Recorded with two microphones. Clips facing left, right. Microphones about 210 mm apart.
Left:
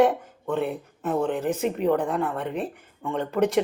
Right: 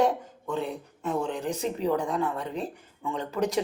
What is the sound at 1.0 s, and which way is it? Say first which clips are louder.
Speech: left 4 dB; 55° left (ahead or behind).